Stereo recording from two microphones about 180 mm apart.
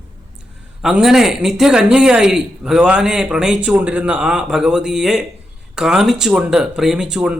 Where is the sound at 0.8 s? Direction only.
Centre (ahead or behind).